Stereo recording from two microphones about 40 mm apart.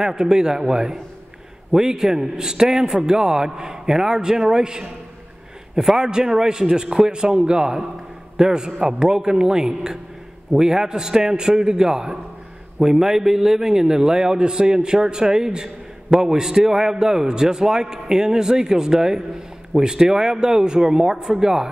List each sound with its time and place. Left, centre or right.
0.0 s a man's voice: centre
5.9 s a man's voice: centre